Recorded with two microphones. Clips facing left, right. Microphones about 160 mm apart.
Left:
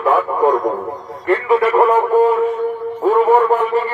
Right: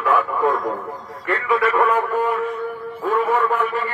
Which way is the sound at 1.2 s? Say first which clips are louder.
Left 6 dB; 35° left (ahead or behind).